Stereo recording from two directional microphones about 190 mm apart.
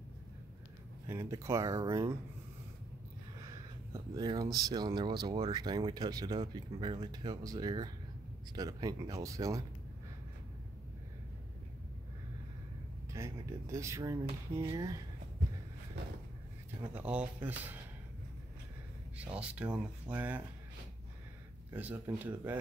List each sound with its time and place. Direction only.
1.0 s speech: 15° right (ahead or behind)
3.4 s a sound: 20° right (ahead or behind)
4.6 s speech: 20° right (ahead or behind)
13.1 s speech: 15° right (ahead or behind)
16.8 s speech: 10° right (ahead or behind)
19.3 s speech: 5° right (ahead or behind)
21.6 s speech: 10° right (ahead or behind)